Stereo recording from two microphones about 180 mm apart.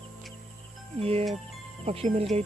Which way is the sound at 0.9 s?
35° right (ahead or behind).